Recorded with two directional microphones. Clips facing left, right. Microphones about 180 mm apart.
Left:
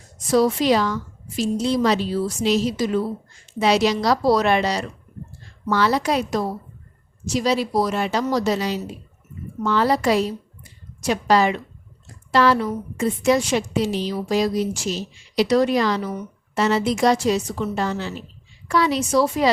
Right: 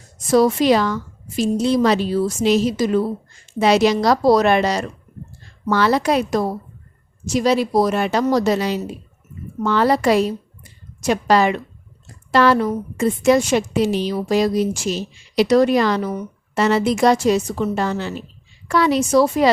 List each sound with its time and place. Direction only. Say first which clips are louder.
0.3 s a woman's voice: right 3 dB; 50° right (ahead or behind)
5.6 s a woman's voice: right 3 dB; 60° right (ahead or behind)